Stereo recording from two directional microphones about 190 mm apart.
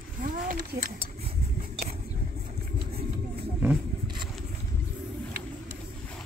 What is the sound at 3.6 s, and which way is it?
Vehicle, 10° right (ahead or behind).